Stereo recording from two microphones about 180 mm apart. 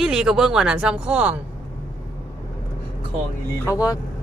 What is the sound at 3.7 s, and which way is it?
Speech, 20° left (ahead or behind).